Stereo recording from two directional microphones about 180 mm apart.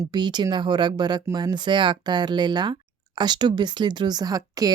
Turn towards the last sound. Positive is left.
turn(degrees=-20)  # may be behind; listen again after turning